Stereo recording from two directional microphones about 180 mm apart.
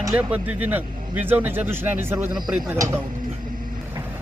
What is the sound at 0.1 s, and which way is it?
Speech, 10° right (ahead or behind).